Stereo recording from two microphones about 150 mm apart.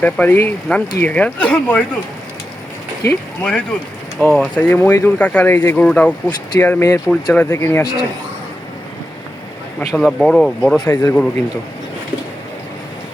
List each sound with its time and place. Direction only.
0.0 s speech: 10° left (ahead or behind)
3.1 s speech: 5° left (ahead or behind)
4.7 s speech: 15° left (ahead or behind)
7.1 s speech: 5° left (ahead or behind)
7.5 s speech: 20° left (ahead or behind)
9.9 s speech: 5° left (ahead or behind)
10.8 s speech: 25° left (ahead or behind)